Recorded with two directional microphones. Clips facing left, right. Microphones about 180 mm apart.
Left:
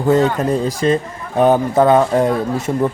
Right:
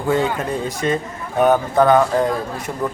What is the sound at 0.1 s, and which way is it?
Speech, 40° left (ahead or behind).